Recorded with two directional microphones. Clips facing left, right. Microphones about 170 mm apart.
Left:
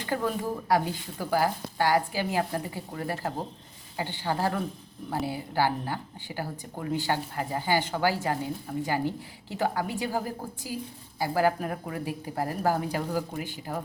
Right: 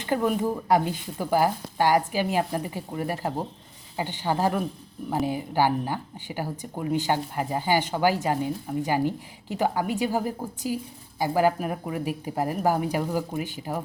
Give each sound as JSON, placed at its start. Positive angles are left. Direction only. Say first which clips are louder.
{"t": 0.0, "sound": "speech", "louder": "right 5 dB", "side_deg": -20}